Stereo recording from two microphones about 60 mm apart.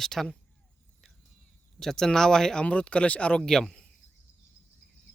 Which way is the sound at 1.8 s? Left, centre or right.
Centre.